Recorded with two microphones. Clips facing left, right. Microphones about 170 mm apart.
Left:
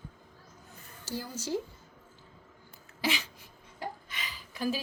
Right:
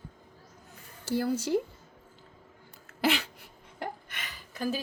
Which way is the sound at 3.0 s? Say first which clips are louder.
Right 5 dB; 65° right (ahead or behind).